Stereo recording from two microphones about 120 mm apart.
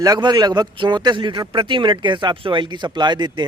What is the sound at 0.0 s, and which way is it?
A man's voice, 35° right (ahead or behind).